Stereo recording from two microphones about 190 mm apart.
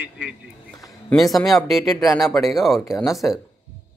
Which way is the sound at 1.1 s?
Centre (ahead or behind).